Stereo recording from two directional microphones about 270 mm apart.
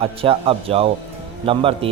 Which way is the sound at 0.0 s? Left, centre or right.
Right.